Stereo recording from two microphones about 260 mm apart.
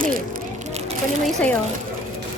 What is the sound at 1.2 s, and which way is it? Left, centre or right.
Speech, centre.